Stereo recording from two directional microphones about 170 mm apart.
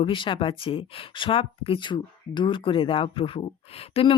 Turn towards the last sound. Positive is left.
turn(degrees=35)  # may be behind; listen again after turning